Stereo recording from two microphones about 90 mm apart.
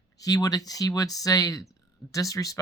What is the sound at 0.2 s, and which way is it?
Speech, 45° left (ahead or behind).